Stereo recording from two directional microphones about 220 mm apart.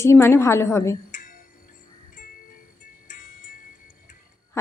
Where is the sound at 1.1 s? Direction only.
35° left (ahead or behind).